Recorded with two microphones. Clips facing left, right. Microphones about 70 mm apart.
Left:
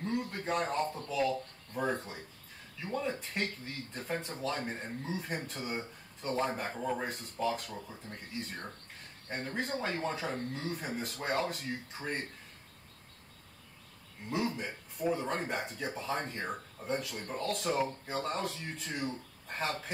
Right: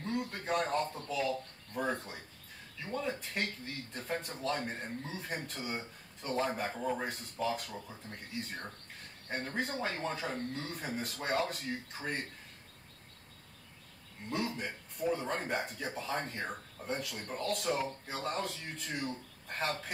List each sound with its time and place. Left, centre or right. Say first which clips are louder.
0.0 s a sound: left 2 dB; centre
1.7 s speech: left 1 dB; centre
9.3 s speech: even; centre
14.3 s speech: left 2 dB; centre